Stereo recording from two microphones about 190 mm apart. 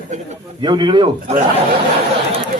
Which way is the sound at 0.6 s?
25° right (ahead or behind).